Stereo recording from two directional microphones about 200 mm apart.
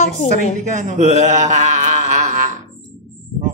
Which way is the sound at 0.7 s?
40° right (ahead or behind).